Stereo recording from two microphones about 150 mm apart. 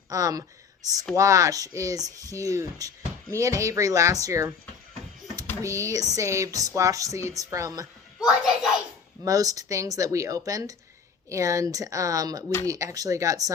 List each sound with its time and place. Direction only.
0.1 s speech: 25° right (ahead or behind)
5.6 s speech: 20° right (ahead or behind)
9.2 s speech: 25° right (ahead or behind)